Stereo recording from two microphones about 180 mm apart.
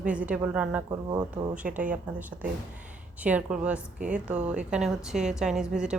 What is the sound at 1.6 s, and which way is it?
A woman's voice, 5° right (ahead or behind).